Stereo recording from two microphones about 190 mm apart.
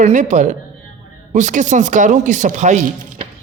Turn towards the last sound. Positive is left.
turn(degrees=-40)  # may be behind; listen again after turning